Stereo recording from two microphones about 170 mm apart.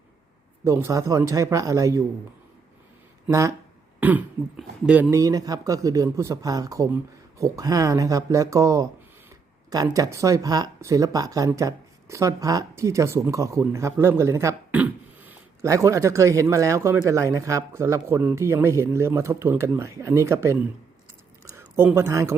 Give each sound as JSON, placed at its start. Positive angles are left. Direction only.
{"t": 0.6, "sound": "speech", "side_deg": -15}
{"t": 3.2, "sound": "speech", "side_deg": -20}
{"t": 4.0, "sound": "speech", "side_deg": -10}
{"t": 5.1, "sound": "speech", "side_deg": -20}